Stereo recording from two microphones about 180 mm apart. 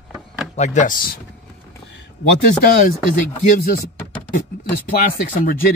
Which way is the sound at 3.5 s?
50° left (ahead or behind).